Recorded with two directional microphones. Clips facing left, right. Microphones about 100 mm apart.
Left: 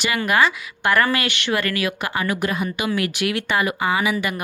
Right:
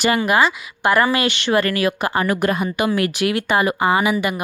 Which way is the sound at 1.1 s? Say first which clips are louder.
Right 4 dB; 30° right (ahead or behind).